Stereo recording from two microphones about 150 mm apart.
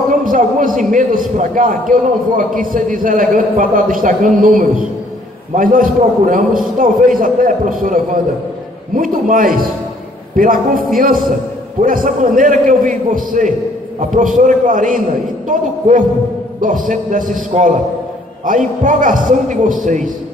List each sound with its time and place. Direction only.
0.1 s a man's voice: 60° right (ahead or behind)